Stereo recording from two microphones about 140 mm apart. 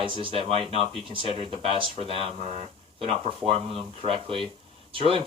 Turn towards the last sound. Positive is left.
turn(degrees=-40)  # may be behind; listen again after turning